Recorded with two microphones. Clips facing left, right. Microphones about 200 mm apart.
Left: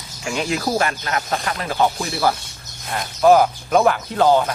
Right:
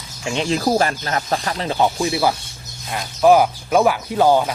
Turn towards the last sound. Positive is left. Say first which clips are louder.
# right 1 dB
turn(degrees=-10)  # may be behind; listen again after turning